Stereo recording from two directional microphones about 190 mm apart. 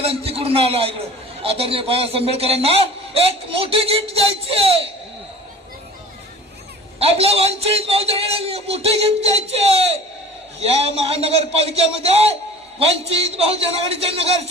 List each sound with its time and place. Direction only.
0.0 s a man's voice: 30° right (ahead or behind)
7.0 s a man's voice: 30° right (ahead or behind)